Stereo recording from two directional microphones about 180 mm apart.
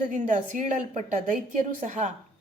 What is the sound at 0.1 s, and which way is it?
A woman's voice, 45° right (ahead or behind).